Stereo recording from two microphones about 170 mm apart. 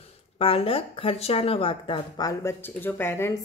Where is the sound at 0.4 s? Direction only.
35° left (ahead or behind).